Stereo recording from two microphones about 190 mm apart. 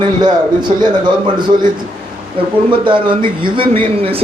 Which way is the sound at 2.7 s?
25° right (ahead or behind).